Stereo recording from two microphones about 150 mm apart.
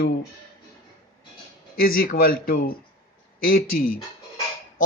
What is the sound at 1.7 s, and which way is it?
Speech, 80° left.